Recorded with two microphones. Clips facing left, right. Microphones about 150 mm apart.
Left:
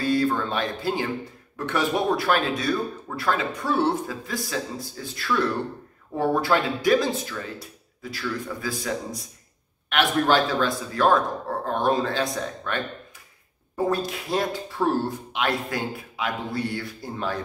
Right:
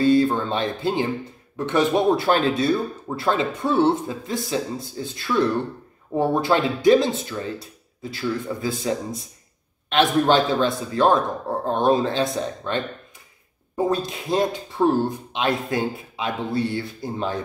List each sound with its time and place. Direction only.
0.0 s speech: 25° right (ahead or behind)